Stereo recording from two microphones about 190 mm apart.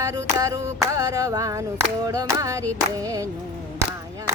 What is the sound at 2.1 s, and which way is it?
Music, 15° right (ahead or behind).